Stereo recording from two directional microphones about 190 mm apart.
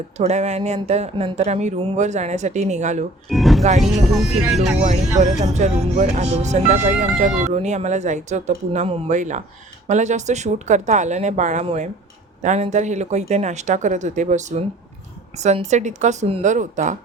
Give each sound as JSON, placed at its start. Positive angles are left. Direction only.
{"t": 0.2, "sound": "speech", "side_deg": -35}
{"t": 3.2, "sound": "speech", "side_deg": 0}
{"t": 4.9, "sound": "speech", "side_deg": -40}